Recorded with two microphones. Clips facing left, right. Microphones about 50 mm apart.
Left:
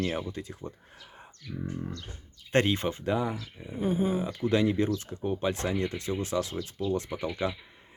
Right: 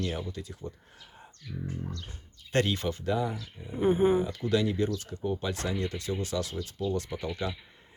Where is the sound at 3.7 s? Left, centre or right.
Right.